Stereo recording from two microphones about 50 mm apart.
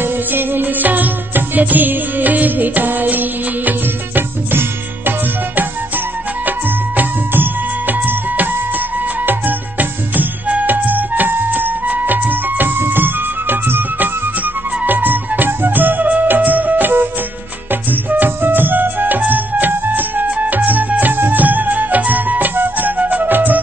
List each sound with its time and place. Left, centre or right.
0.0 s music: right
9.2 s music: right
18.1 s music: right